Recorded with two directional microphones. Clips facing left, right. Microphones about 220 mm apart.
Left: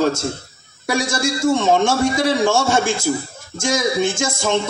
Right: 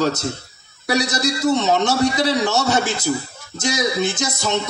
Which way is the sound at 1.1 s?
25° left (ahead or behind).